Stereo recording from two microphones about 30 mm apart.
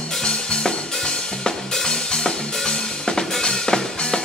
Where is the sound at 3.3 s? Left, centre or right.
Centre.